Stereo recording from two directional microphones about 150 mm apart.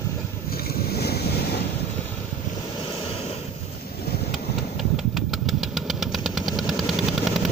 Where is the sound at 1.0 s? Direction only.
90° left.